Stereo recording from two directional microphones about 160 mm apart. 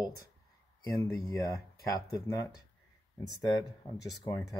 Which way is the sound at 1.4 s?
20° left (ahead or behind).